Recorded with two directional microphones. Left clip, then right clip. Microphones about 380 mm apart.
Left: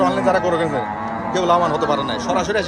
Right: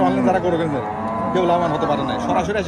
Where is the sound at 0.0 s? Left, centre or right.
Centre.